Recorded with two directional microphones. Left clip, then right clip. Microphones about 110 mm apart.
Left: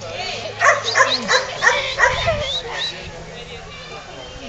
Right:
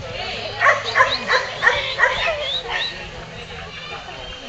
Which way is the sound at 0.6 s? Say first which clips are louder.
Left 1 dB; 40° left (ahead or behind).